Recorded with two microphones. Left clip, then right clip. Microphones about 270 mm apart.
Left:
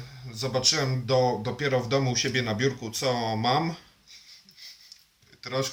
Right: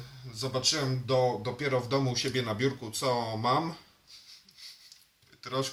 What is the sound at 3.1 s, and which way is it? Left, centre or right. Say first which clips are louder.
Speech: left 3 dB; right.